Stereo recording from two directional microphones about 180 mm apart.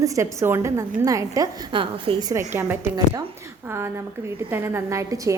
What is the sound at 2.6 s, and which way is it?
A woman's voice, 15° right (ahead or behind).